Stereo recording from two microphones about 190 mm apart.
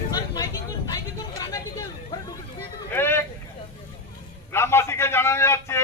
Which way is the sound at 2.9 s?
10° left (ahead or behind).